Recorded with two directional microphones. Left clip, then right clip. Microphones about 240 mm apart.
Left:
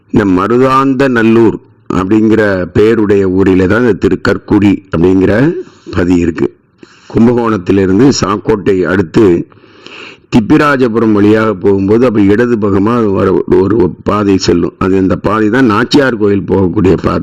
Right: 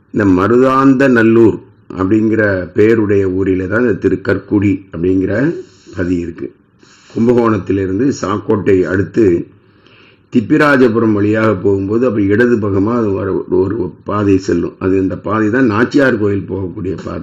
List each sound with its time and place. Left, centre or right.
0.1 s a man's voice: left
10.4 s a man's voice: left